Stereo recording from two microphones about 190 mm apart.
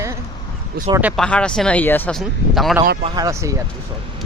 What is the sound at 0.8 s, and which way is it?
Speech, 50° right (ahead or behind).